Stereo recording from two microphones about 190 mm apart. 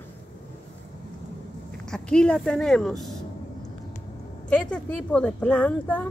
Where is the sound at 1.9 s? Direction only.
5° left (ahead or behind).